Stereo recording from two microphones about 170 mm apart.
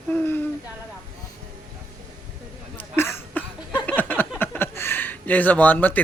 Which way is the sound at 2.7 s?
15° left (ahead or behind).